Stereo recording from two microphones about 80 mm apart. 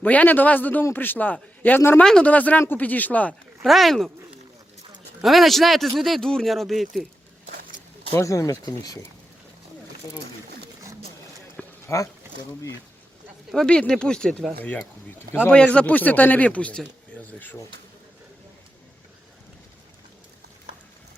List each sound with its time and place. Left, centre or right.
0.0 s speech: centre
2.0 s speech: centre
3.6 s speech: centre
5.2 s speech: centre
8.2 s speech: left
11.6 s a sound: centre
13.5 s speech: centre
15.4 s speech: centre